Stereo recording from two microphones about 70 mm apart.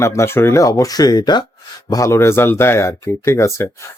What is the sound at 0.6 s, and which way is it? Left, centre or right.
Speech, left.